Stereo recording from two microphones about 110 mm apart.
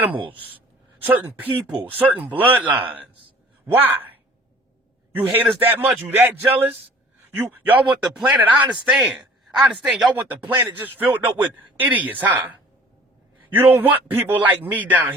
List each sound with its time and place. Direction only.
0.0 s speech: 15° right (ahead or behind)
5.1 s a man's voice: 15° right (ahead or behind)
10.5 s speech: 15° right (ahead or behind)